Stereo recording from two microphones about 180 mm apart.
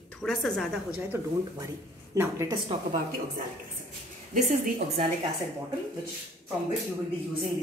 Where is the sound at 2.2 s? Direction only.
15° right (ahead or behind).